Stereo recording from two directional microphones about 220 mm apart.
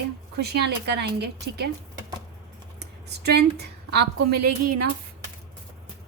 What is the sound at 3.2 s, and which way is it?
Speech, 45° right (ahead or behind).